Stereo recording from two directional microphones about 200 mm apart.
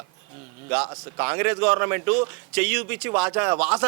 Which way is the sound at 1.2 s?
10° right (ahead or behind).